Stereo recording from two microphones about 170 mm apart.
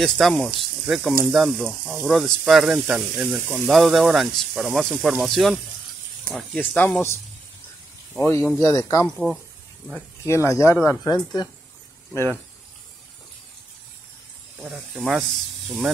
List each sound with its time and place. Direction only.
0.0 s speech: centre (ahead or behind); by 9.0 s 15° left (ahead or behind)
9.0 s speech: centre (ahead or behind)
10.2 s speech: 15° left (ahead or behind)
14.6 s speech: centre (ahead or behind)